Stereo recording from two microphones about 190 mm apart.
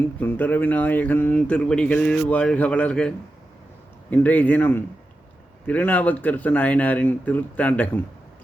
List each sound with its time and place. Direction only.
0.2 s speech: 10° left (ahead or behind)
4.1 s speech: 10° left (ahead or behind)